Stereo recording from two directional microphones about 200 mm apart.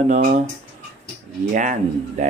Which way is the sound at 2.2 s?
35° right (ahead or behind).